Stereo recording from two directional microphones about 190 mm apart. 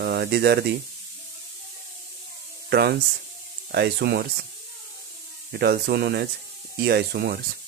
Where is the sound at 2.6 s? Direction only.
60° right (ahead or behind).